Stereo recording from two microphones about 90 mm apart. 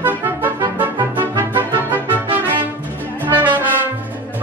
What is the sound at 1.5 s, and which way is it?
Music, 25° right (ahead or behind).